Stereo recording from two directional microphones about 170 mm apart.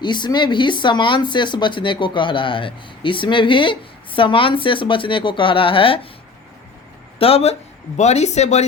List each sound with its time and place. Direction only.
0.0 s speech: 25° left (ahead or behind)
7.2 s speech: 35° left (ahead or behind)